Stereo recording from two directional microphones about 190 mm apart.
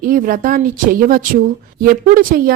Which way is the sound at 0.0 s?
45° right (ahead or behind).